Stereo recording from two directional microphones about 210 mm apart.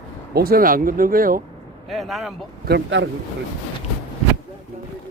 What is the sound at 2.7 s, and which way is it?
Speech, 55° right (ahead or behind).